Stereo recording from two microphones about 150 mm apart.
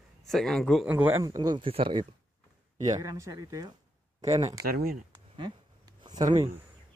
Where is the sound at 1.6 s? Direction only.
35° right (ahead or behind).